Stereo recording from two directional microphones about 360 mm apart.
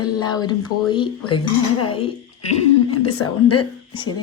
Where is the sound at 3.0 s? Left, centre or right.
Left.